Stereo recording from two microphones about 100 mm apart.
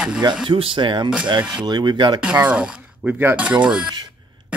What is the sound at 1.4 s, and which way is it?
Speech, 10° right (ahead or behind).